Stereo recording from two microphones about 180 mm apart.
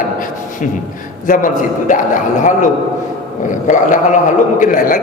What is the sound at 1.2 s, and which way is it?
A man's voice, 45° left (ahead or behind).